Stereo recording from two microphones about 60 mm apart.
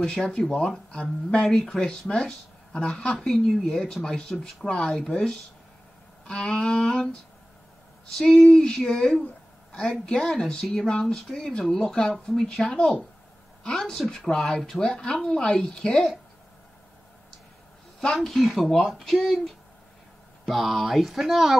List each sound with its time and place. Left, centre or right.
0.0 s speech: centre
8.3 s speech: centre
18.0 s speech: centre